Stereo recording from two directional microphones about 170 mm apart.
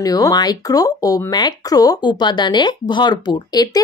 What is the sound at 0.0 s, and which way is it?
A woman's voice, 20° left (ahead or behind).